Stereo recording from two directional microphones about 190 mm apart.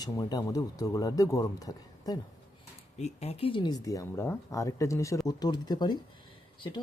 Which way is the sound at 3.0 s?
35° left (ahead or behind).